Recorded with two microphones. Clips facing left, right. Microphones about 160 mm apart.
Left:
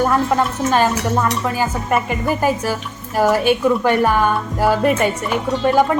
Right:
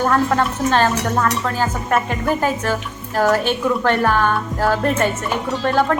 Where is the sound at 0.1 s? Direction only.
10° left (ahead or behind).